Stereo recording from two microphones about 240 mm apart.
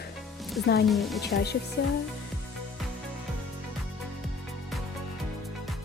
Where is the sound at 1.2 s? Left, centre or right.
Left.